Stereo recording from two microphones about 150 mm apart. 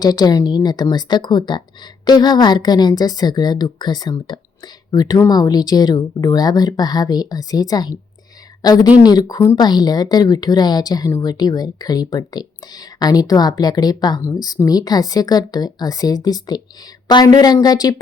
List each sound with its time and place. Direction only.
0.0 s a woman's voice: 25° left (ahead or behind)